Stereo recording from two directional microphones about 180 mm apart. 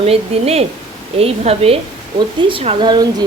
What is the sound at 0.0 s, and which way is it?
A woman's voice, 35° right (ahead or behind).